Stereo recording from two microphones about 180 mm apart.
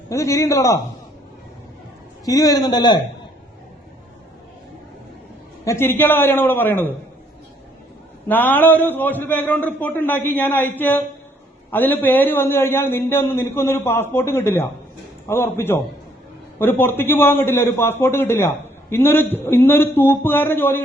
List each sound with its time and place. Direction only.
0.1 s a man's voice: 15° left (ahead or behind)
2.2 s a man's voice: 20° left (ahead or behind)
5.6 s a man's voice: 15° left (ahead or behind)
8.3 s a man's voice: 10° left (ahead or behind)